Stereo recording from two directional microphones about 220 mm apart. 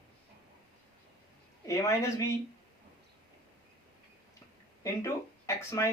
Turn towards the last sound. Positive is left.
turn(degrees=10)  # may be behind; listen again after turning